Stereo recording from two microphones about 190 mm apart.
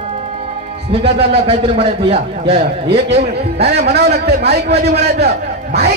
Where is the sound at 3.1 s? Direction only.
60° right (ahead or behind).